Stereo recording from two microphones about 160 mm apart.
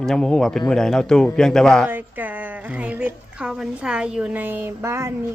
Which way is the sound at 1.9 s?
10° right (ahead or behind).